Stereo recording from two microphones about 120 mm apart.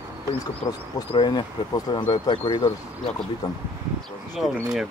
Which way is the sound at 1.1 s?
40° left (ahead or behind).